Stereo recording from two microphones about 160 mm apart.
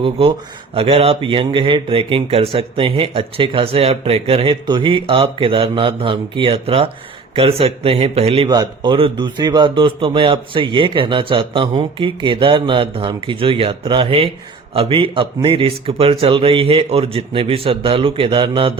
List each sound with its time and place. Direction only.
0.0 s speech: 35° right (ahead or behind)
8.4 s speech: 25° right (ahead or behind)